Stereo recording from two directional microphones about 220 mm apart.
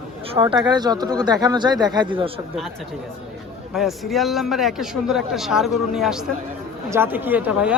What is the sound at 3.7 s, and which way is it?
A man's voice, centre (ahead or behind).